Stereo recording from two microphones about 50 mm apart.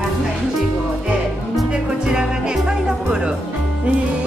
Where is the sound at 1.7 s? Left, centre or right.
Centre.